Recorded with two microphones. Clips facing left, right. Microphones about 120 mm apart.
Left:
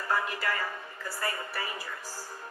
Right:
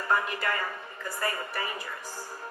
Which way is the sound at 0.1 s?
20° right (ahead or behind).